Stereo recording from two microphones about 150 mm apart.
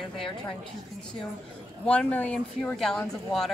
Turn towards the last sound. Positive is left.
turn(degrees=0)  # may be behind; listen again after turning